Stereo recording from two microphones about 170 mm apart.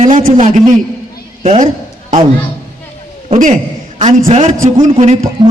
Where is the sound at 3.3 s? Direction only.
45° right (ahead or behind).